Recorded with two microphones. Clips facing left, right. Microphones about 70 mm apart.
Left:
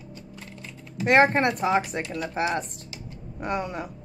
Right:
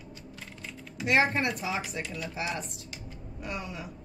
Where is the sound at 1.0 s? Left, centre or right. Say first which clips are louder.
Left 7 dB; left.